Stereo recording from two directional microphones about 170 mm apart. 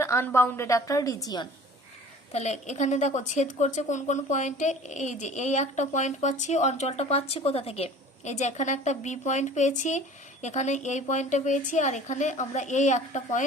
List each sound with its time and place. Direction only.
0.0 s a woman's voice: 15° left (ahead or behind)
2.3 s a woman's voice: 40° left (ahead or behind)